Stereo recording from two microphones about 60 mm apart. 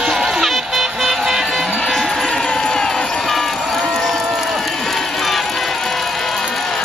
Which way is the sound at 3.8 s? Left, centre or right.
Centre.